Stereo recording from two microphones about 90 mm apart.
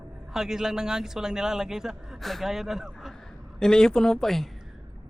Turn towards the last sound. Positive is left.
turn(degrees=5)  # may be behind; listen again after turning